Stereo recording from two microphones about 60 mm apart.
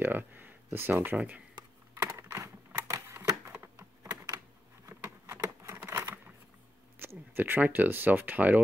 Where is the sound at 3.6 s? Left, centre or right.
Right.